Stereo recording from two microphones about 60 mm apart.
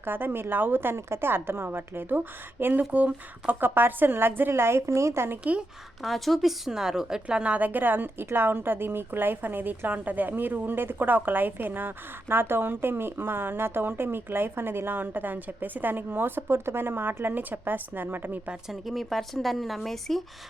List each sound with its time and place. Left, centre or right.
0.0 s a woman's voice: right
5.4 s speech: centre
6.0 s speech: centre
6.7 s a woman's voice: centre; by 18.3 s right
18.7 s speech: centre